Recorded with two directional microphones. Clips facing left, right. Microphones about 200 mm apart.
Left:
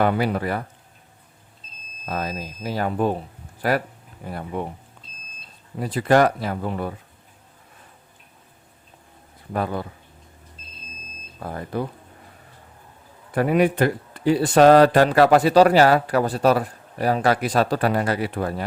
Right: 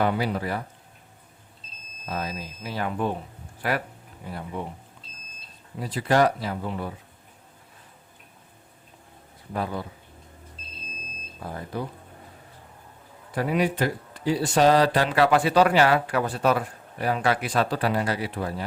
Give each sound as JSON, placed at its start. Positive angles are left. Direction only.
{"t": 0.0, "sound": "speech", "side_deg": 55}
{"t": 2.0, "sound": "speech", "side_deg": 55}
{"t": 4.3, "sound": "speech", "side_deg": 55}
{"t": 5.8, "sound": "speech", "side_deg": 55}
{"t": 9.5, "sound": "speech", "side_deg": 55}
{"t": 11.7, "sound": "speech", "side_deg": 55}
{"t": 13.3, "sound": "speech", "side_deg": 55}